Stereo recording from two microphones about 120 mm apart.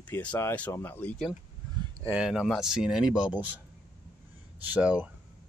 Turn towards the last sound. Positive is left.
turn(degrees=-10)  # may be behind; listen again after turning